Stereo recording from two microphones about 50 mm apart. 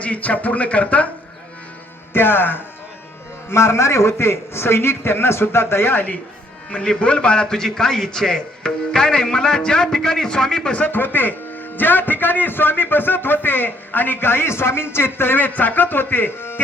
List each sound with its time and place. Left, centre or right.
0.0 s speech: left
2.1 s speech: left
3.5 s a man's voice: left
6.7 s a man's voice: left
10.8 s speech: left
15.4 s speech: left